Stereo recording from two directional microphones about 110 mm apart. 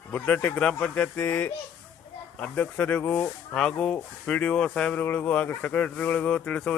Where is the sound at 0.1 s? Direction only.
15° left (ahead or behind).